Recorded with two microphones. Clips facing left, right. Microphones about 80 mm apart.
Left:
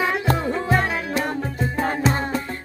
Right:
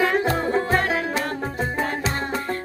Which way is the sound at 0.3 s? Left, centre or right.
Right.